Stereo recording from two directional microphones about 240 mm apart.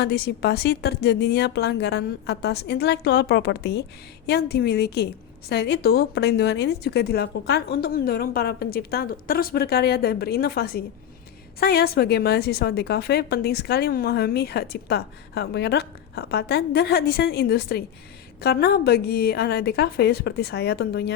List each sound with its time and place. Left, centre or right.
0.0 s a woman's voice: left